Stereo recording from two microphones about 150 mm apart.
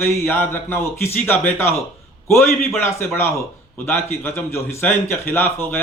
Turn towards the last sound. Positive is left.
turn(degrees=15)  # may be behind; listen again after turning